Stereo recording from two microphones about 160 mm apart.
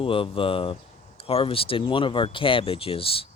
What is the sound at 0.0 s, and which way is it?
Speech, 35° left (ahead or behind).